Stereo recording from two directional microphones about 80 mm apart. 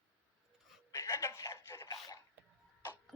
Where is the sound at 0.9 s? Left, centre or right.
Left.